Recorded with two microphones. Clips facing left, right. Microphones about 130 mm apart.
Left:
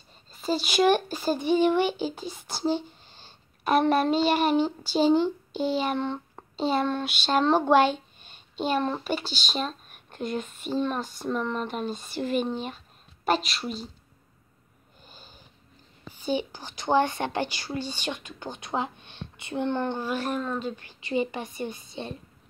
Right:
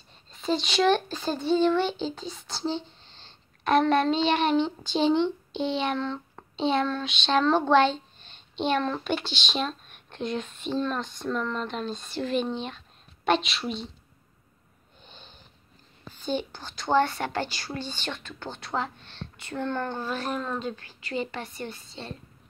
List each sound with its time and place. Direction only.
0.3 s speech: 5° left (ahead or behind)
3.9 s child singing: 5° left (ahead or behind)
5.9 s speech: 15° left (ahead or behind)
6.5 s speech: 5° left (ahead or behind)
15.0 s wheeze: 5° left (ahead or behind)
16.1 s speech: 10° left (ahead or behind)
20.2 s child singing: centre (ahead or behind)
20.7 s speech: 20° left (ahead or behind)